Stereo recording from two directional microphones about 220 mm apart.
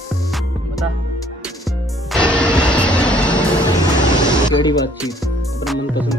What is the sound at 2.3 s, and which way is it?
Music, 5° left (ahead or behind).